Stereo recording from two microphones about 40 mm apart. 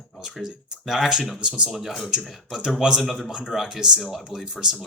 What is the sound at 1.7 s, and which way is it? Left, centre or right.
Speech, centre.